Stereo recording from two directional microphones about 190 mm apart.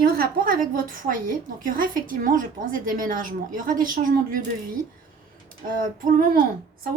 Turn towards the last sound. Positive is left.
turn(degrees=-45)  # may be behind; listen again after turning